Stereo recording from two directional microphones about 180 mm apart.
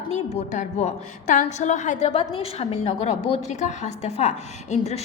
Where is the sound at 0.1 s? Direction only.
35° left (ahead or behind).